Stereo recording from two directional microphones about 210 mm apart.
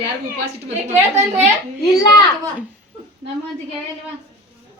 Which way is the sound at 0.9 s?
35° right (ahead or behind).